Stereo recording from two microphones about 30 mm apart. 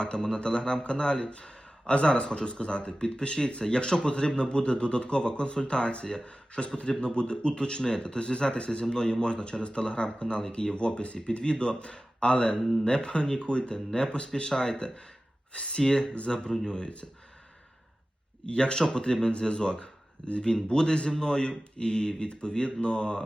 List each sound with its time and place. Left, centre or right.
0.3 s a man's voice: left
10.8 s a man's voice: left
15.8 s speech: left
18.4 s a man's voice: left